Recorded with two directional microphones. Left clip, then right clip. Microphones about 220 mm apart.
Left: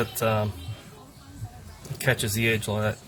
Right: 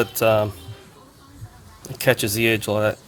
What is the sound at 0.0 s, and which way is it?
Speech, 40° right (ahead or behind).